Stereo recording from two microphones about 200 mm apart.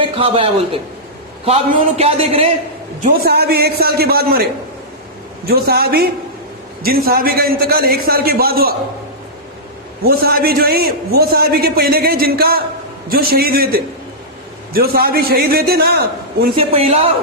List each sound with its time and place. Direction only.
0.0 s a man's voice: 25° right (ahead or behind)
3.0 s a man's voice: 50° right (ahead or behind)
5.5 s a man's voice: 50° right (ahead or behind)
10.0 s a man's voice: 50° right (ahead or behind)
16.6 s a man's voice: 30° right (ahead or behind)